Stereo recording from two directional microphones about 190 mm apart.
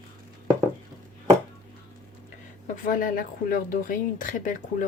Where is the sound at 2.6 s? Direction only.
45° left (ahead or behind).